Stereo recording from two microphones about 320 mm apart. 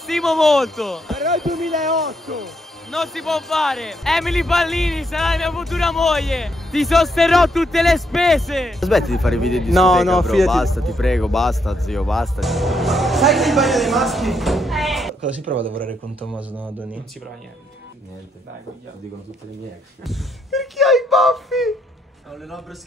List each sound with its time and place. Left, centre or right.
0.0 s speech: centre
15.5 s speech: right
15.9 s speech: centre
20.1 s speech: centre